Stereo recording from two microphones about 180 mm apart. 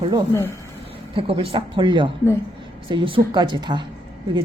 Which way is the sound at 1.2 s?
30° right (ahead or behind).